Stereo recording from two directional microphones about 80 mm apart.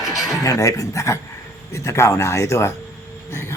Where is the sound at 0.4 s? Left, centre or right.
Left.